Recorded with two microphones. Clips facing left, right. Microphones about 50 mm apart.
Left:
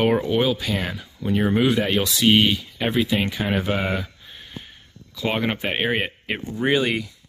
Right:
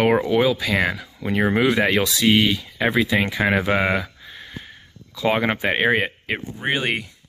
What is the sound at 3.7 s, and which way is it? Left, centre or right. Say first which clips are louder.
Speech: right 4 dB; right.